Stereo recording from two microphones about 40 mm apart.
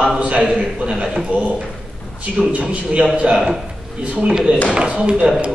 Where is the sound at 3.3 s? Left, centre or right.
Centre.